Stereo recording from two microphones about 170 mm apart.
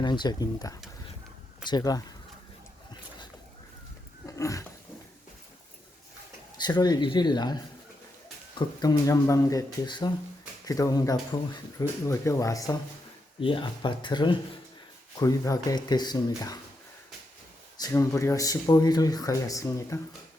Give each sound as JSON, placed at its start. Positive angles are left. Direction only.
{"t": 0.0, "sound": "speech", "side_deg": 25}
{"t": 4.3, "sound": "a sound", "side_deg": 20}
{"t": 6.6, "sound": "speech", "side_deg": 25}
{"t": 8.5, "sound": "speech", "side_deg": 20}
{"t": 13.4, "sound": "speech", "side_deg": 30}
{"t": 17.7, "sound": "speech", "side_deg": 20}